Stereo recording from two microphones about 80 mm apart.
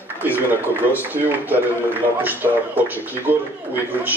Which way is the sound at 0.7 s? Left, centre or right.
Right.